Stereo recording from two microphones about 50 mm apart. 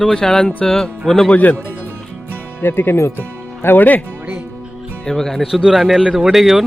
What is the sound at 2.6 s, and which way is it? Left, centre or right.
Speech, left.